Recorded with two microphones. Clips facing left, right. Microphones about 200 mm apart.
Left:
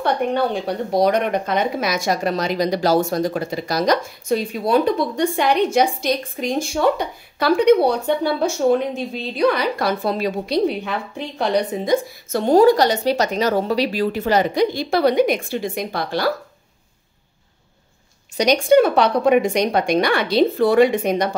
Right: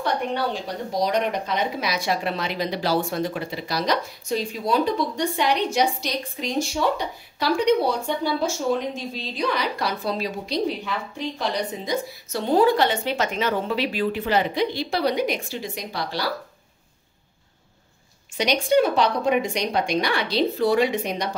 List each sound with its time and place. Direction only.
0.0 s a woman's voice: 55° left (ahead or behind)
18.4 s a woman's voice: 55° left (ahead or behind)